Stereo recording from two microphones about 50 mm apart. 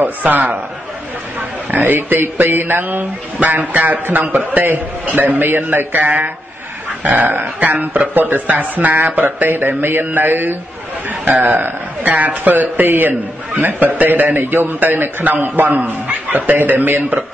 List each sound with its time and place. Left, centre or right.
0.0 s speech: right
1.7 s a man's voice: right
16.1 s chuckle: right
16.5 s speech: right